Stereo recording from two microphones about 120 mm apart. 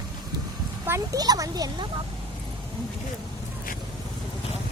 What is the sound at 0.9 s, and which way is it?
Speech, 25° right (ahead or behind).